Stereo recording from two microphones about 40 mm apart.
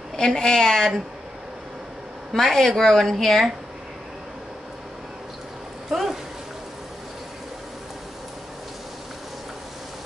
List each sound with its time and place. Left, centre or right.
0.1 s a woman's voice: centre
2.3 s a woman's voice: centre
5.9 s a sound: centre